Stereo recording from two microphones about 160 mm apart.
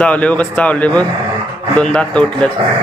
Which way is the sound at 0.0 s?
10° left (ahead or behind).